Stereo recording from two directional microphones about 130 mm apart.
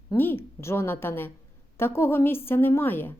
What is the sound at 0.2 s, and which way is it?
A woman's voice, 15° left (ahead or behind).